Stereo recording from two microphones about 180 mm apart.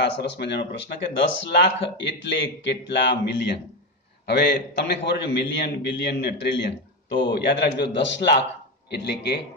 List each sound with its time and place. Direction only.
0.0 s speech: 70° left (ahead or behind)